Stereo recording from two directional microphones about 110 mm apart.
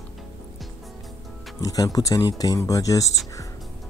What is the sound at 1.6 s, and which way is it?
Speech, 35° left (ahead or behind).